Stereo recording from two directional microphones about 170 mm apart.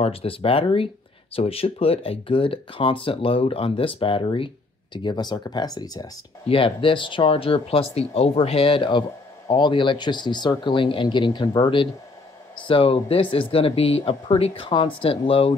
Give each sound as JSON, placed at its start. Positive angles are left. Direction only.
{"t": 0.0, "sound": "speech", "side_deg": 35}